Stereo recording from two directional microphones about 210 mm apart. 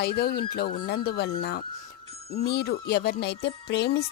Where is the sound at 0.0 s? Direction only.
50° left (ahead or behind).